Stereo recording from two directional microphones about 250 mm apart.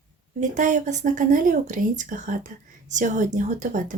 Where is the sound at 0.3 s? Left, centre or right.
Right.